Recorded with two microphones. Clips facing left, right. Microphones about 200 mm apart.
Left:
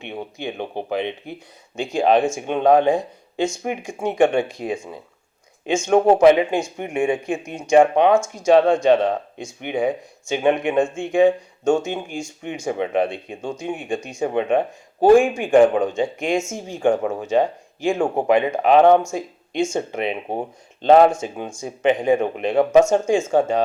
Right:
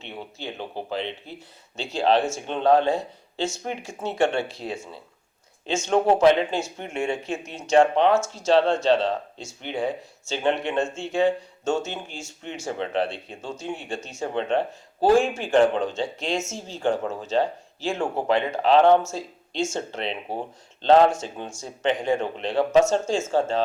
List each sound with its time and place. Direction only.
0.0 s speech: 15° left (ahead or behind)